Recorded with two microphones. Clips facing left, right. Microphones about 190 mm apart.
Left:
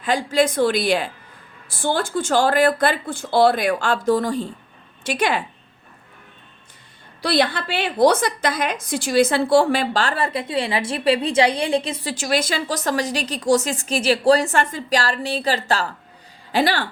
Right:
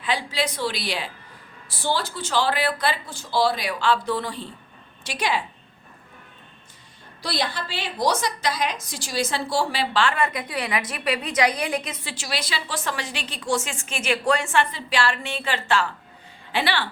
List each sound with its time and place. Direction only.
0.0 s a woman's voice: 45° left (ahead or behind)
7.2 s a woman's voice: 60° left (ahead or behind); by 12.1 s 30° left (ahead or behind)
12.1 s a woman's voice: 45° left (ahead or behind)